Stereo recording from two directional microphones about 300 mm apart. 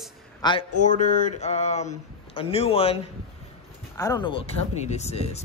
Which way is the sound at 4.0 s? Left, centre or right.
Centre.